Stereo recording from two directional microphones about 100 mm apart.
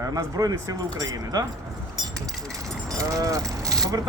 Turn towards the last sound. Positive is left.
turn(degrees=-35)  # may be behind; listen again after turning